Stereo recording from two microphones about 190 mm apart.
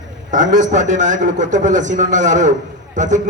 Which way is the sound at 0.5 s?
40° right (ahead or behind).